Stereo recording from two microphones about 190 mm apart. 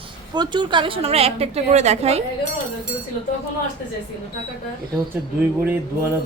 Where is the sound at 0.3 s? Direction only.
25° right (ahead or behind).